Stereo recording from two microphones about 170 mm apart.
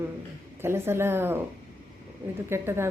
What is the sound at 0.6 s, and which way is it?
Speech, 15° right (ahead or behind).